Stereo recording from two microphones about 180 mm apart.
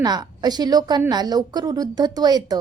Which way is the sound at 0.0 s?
20° right (ahead or behind).